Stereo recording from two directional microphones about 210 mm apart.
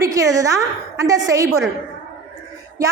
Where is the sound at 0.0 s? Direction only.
15° right (ahead or behind).